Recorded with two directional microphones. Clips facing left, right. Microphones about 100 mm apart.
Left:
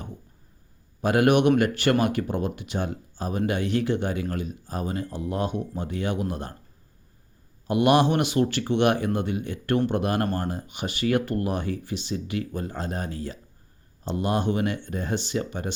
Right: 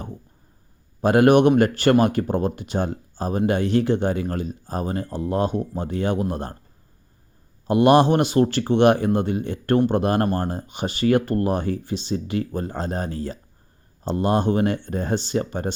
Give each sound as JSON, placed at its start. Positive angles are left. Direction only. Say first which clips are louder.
{"t": 1.0, "sound": "speech", "louder": "right 5 dB", "side_deg": -35}
{"t": 7.7, "sound": "speech", "louder": "right 5 dB", "side_deg": -35}